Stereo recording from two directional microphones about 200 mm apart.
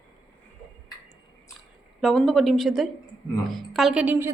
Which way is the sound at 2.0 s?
Centre (ahead or behind).